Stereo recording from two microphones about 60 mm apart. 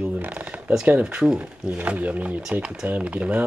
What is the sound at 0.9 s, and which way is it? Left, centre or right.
Speech, right.